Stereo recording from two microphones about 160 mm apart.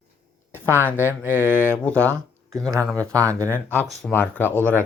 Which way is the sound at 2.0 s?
15° right (ahead or behind).